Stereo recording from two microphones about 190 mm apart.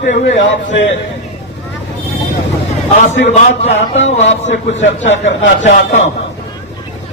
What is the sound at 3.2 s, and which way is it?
Speech, 40° left (ahead or behind).